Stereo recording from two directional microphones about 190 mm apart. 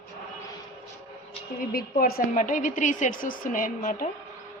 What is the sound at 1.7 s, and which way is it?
A woman's voice, 45° left (ahead or behind).